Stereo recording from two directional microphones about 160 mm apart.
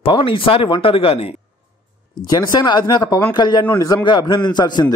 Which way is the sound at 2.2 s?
25° left (ahead or behind).